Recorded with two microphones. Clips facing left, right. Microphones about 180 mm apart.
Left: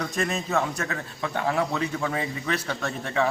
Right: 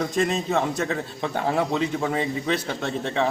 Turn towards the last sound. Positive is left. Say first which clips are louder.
# right 2 dB
turn(degrees=-25)  # may be behind; listen again after turning